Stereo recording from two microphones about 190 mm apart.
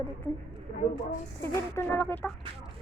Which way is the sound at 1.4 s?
10° left (ahead or behind).